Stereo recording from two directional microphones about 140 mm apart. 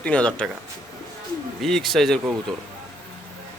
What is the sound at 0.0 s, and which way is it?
Speech, 10° left (ahead or behind).